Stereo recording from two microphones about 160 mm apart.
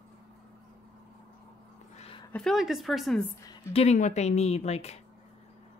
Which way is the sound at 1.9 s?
40° left (ahead or behind).